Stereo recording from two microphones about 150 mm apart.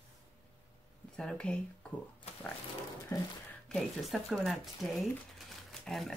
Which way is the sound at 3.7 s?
Centre (ahead or behind).